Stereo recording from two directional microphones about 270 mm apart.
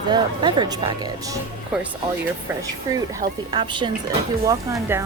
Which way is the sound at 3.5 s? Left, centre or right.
Centre.